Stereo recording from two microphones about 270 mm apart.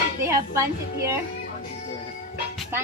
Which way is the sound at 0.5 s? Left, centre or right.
Centre.